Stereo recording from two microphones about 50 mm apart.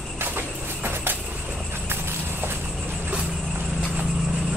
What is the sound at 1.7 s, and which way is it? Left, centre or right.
Horse, right.